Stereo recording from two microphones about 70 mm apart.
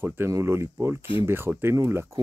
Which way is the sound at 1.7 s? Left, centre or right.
Right.